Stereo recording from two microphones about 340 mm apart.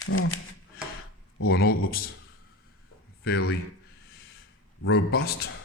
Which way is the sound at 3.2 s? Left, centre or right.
Left.